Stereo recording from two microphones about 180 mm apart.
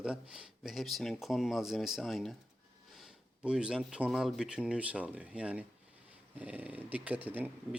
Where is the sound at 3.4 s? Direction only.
5° right (ahead or behind).